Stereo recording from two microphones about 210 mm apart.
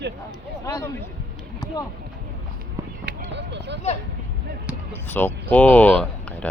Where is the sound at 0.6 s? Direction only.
15° left (ahead or behind).